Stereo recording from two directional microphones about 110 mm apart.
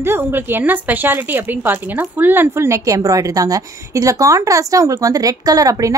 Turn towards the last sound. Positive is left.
turn(degrees=-30)  # may be behind; listen again after turning